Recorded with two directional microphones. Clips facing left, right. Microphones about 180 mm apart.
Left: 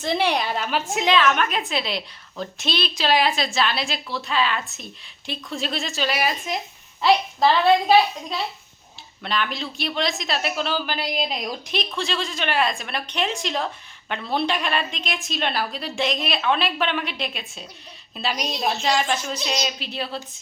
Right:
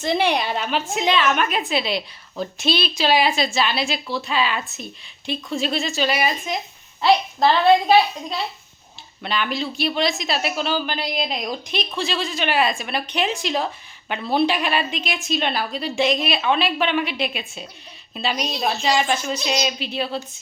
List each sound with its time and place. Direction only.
0.0 s a woman's voice: centre (ahead or behind)
9.2 s a woman's voice: 5° right (ahead or behind)